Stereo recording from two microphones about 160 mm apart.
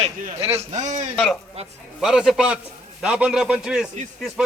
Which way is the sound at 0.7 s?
50° right (ahead or behind).